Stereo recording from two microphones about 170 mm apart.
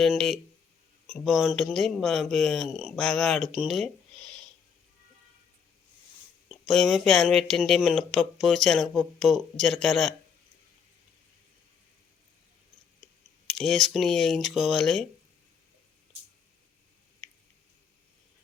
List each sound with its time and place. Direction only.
0.0 s speech: centre (ahead or behind)
6.5 s speech: centre (ahead or behind)
13.5 s speech: centre (ahead or behind)